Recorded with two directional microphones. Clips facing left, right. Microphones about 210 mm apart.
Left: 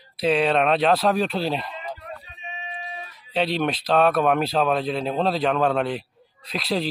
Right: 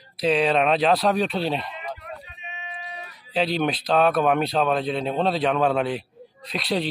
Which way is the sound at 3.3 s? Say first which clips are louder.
Even; centre (ahead or behind).